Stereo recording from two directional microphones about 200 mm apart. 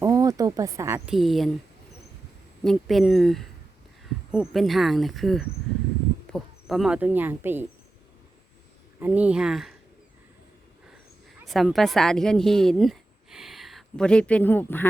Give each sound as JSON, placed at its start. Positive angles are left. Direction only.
{"t": 0.0, "sound": "a sound", "side_deg": -15}
{"t": 1.1, "sound": "speech", "side_deg": 0}
{"t": 2.6, "sound": "speech", "side_deg": 0}
{"t": 9.0, "sound": "speech", "side_deg": -10}
{"t": 11.4, "sound": "a woman's voice", "side_deg": 0}